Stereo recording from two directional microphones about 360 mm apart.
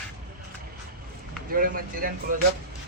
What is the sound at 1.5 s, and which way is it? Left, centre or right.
Speech, right.